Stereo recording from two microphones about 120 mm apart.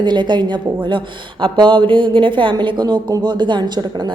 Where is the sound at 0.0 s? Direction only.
40° right (ahead or behind).